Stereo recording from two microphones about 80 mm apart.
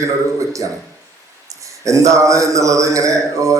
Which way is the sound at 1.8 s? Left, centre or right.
Right.